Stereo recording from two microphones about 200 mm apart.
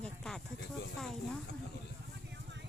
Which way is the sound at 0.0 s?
Centre (ahead or behind).